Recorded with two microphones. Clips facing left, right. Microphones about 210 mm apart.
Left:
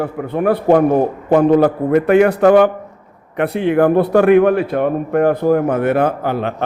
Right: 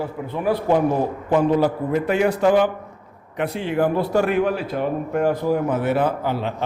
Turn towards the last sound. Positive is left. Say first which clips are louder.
# left 5 dB
turn(degrees=55)  # may be behind; listen again after turning